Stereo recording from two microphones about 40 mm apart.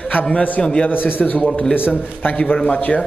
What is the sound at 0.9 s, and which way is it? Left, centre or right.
Speech, left.